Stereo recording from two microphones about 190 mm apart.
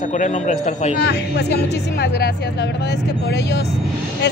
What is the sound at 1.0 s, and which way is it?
Speech, 60° left (ahead or behind).